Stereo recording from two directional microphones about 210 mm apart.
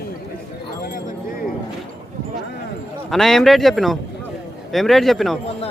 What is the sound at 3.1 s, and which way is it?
A man's voice, centre (ahead or behind).